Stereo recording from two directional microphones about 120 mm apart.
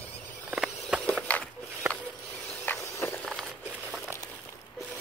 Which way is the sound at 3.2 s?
Centre (ahead or behind).